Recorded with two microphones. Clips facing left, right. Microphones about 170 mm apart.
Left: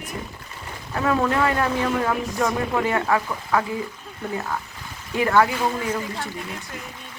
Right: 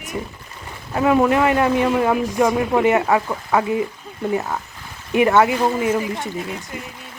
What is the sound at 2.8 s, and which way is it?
Speech, 20° right (ahead or behind).